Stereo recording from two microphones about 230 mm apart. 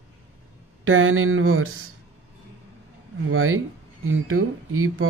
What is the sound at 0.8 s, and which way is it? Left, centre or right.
Speech, right.